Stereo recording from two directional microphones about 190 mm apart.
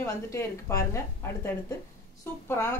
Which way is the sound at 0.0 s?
15° left (ahead or behind).